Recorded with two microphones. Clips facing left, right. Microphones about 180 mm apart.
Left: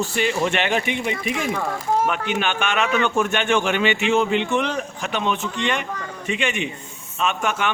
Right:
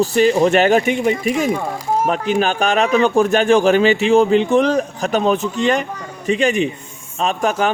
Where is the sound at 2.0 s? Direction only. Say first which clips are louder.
Right 6 dB; 35° right (ahead or behind).